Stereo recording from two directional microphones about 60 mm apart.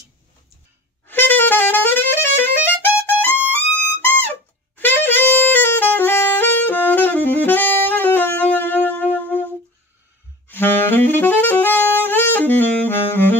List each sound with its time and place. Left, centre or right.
1.0 s music: left
4.7 s saxophone: left
10.5 s saxophone: left